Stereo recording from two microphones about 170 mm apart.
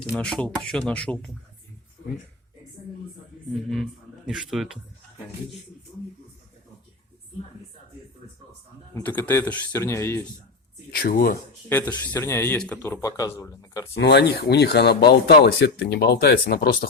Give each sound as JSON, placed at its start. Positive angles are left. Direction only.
{"t": 0.2, "sound": "speech", "side_deg": 5}
{"t": 3.5, "sound": "speech", "side_deg": 0}
{"t": 8.9, "sound": "speech", "side_deg": 15}
{"t": 10.9, "sound": "speech", "side_deg": 60}
{"t": 11.7, "sound": "speech", "side_deg": 10}
{"t": 13.9, "sound": "speech", "side_deg": 75}